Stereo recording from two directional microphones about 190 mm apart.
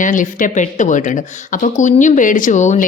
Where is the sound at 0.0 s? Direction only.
45° left (ahead or behind).